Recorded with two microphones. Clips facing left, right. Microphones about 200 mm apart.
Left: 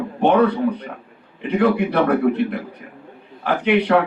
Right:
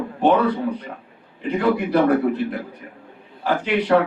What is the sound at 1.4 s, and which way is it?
Speech, 65° left (ahead or behind).